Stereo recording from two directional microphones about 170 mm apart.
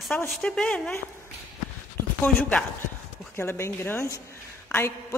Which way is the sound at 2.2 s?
5° left (ahead or behind).